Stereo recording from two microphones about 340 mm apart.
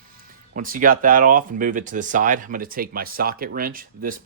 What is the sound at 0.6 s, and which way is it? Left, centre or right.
Speech, right.